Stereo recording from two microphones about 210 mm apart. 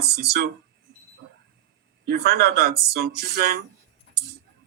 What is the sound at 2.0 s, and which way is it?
Speech, 45° right (ahead or behind).